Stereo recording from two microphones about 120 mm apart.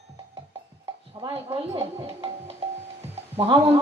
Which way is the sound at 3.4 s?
50° right (ahead or behind).